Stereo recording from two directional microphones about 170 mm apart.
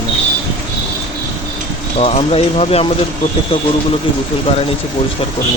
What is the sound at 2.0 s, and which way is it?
Speech, 35° left (ahead or behind).